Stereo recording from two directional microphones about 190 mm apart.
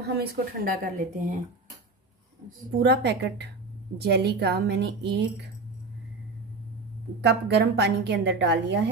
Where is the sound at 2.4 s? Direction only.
60° right (ahead or behind).